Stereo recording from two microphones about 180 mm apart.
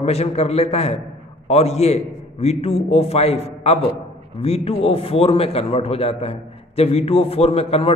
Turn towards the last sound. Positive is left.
turn(degrees=35)  # may be behind; listen again after turning